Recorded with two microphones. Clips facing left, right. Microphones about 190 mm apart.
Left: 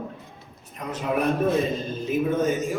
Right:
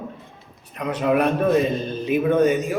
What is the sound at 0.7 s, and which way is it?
A man's voice, 70° right (ahead or behind).